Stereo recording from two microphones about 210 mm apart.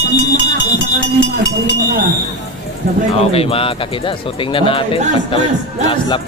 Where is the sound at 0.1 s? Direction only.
55° left (ahead or behind).